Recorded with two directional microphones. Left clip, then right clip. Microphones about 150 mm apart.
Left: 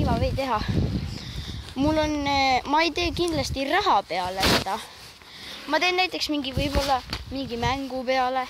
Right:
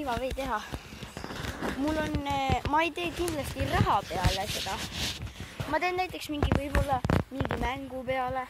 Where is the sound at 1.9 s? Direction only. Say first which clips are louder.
Left 7 dB; 40° left (ahead or behind).